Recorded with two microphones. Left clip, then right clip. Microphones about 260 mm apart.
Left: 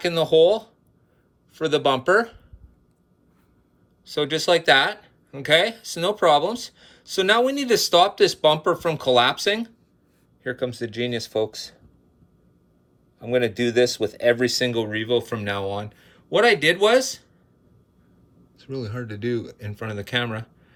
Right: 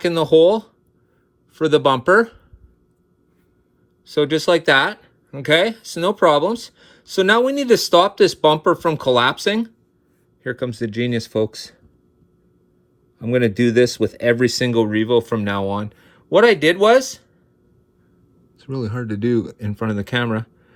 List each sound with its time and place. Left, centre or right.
0.0 s speech: centre
4.0 s speech: centre
13.1 s speech: right; by 17.2 s centre
18.5 s speech: centre